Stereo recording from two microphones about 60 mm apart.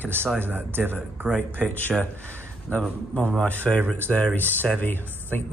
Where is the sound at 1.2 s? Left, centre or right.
Centre.